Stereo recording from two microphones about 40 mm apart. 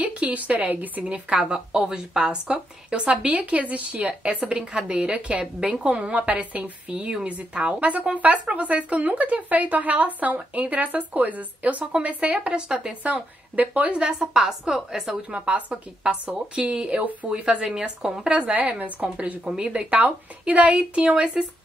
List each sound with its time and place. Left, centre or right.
0.0 s speech: right
1.0 s a woman's voice: right
3.3 s a woman's voice: right
4.1 s a woman's voice: right
12.5 s a woman's voice: centre
13.0 s a woman's voice: right
14.1 s a woman's voice: centre
15.3 s a woman's voice: right; by 18.3 s centre
18.3 s a woman's voice: right
19.4 s a woman's voice: right